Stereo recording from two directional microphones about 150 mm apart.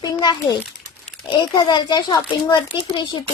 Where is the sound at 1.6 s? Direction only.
30° left (ahead or behind).